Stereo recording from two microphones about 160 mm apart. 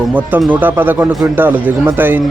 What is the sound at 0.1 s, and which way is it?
Speech, 10° right (ahead or behind).